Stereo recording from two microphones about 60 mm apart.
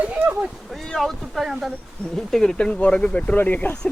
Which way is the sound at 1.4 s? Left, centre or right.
Centre.